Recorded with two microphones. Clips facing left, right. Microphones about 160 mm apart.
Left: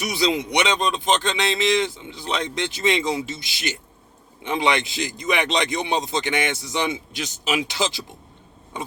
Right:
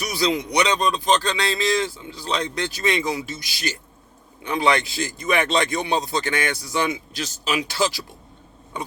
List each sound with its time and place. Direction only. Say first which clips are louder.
0.0 s speech: left 1 dB; 20° left (ahead or behind)